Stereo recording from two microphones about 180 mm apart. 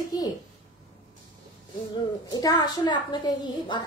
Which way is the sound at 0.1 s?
20° left (ahead or behind).